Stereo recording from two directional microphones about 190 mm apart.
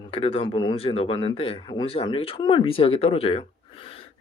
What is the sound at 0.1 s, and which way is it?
Speech, 30° left (ahead or behind).